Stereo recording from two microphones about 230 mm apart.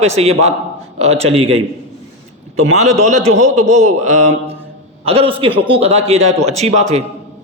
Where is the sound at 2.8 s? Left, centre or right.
Right.